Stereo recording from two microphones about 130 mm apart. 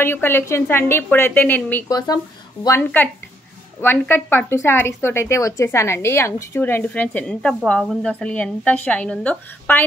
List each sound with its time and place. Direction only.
0.0 s a woman's voice: 15° left (ahead or behind)
1.9 s speech: 30° left (ahead or behind)
2.8 s a woman's voice: 10° left (ahead or behind)